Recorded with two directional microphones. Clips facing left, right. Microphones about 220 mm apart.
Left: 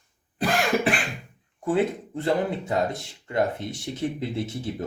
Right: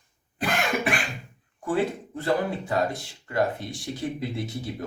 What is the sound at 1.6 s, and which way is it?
Speech, 25° left (ahead or behind).